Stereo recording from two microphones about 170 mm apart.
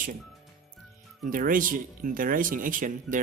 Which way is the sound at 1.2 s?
55° right (ahead or behind).